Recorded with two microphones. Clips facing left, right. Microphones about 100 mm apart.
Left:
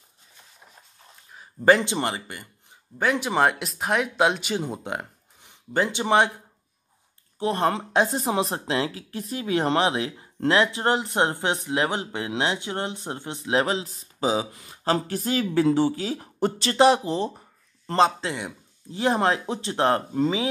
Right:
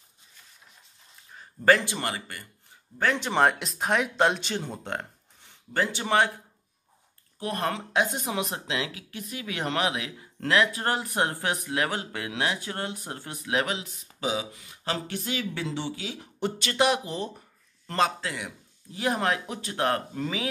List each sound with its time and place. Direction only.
1.3 s speech: 15° left (ahead or behind)
3.0 s speech: 10° left (ahead or behind)
7.3 s speech: 25° left (ahead or behind)